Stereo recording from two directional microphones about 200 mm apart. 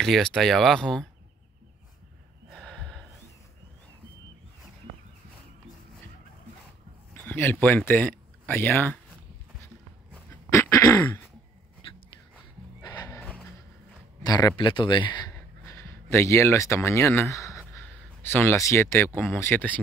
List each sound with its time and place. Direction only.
0.0 s speech: centre (ahead or behind)
2.5 s snort: 5° left (ahead or behind)
7.2 s speech: 10° left (ahead or behind)
10.5 s throat clearing: 15° left (ahead or behind)
12.8 s horse: 20° left (ahead or behind)
14.2 s speech: 20° left (ahead or behind)
17.7 s a sound: 10° left (ahead or behind)
19.1 s speech: 10° left (ahead or behind)